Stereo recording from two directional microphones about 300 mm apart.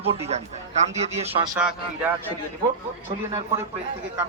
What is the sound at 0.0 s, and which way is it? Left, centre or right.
Speech, centre.